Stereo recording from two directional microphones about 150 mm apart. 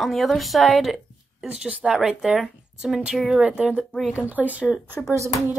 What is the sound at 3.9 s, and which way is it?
Speech, 5° left (ahead or behind).